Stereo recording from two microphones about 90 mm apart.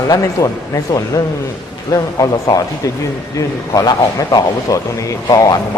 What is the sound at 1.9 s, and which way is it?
Speech, 40° left (ahead or behind).